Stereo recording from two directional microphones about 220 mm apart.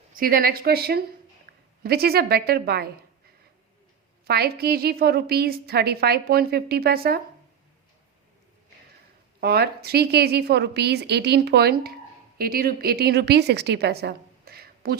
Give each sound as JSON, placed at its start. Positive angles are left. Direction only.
{"t": 0.1, "sound": "a woman's voice", "side_deg": -40}
{"t": 4.3, "sound": "a woman's voice", "side_deg": -45}
{"t": 9.4, "sound": "a woman's voice", "side_deg": -45}